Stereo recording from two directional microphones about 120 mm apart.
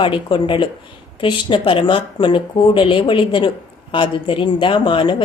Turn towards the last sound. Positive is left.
turn(degrees=45)  # may be behind; listen again after turning